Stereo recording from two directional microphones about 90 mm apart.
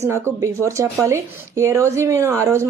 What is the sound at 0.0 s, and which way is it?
A woman's voice, 30° right (ahead or behind).